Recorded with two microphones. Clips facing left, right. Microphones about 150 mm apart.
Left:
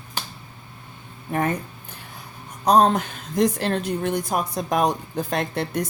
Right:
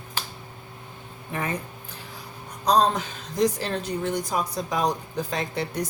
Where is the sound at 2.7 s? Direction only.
55° left (ahead or behind).